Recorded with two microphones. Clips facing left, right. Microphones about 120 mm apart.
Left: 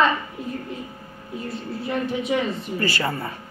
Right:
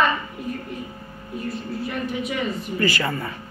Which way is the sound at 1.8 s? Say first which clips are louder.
Left 4 dB; 25° left (ahead or behind).